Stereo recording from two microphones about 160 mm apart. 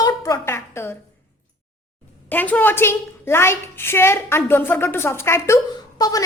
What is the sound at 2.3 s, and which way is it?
A woman's voice, 10° left (ahead or behind).